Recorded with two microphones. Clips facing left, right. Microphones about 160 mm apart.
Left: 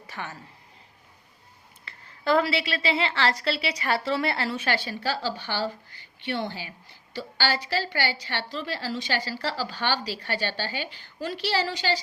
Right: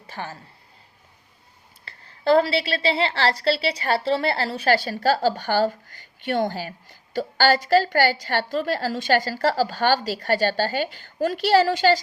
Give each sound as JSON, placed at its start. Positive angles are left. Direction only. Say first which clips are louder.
{"t": 0.1, "sound": "speech", "louder": "right 4 dB", "side_deg": -30}
{"t": 1.8, "sound": "a woman's voice", "louder": "right 6 dB", "side_deg": -35}